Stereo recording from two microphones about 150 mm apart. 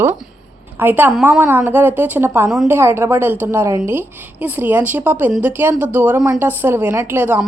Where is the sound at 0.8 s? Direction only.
15° right (ahead or behind).